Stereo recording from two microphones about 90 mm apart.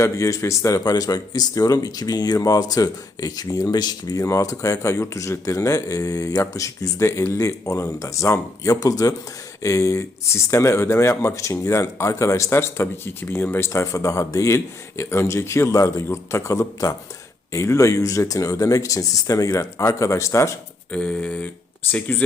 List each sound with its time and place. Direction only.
0.0 s speech: 35° left (ahead or behind)
20.9 s speech: 15° left (ahead or behind)